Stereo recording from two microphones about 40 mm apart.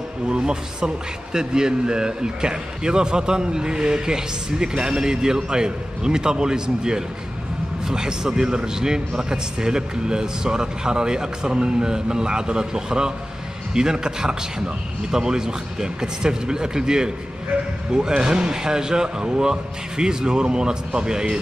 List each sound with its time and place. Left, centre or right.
0.3 s a man's voice: centre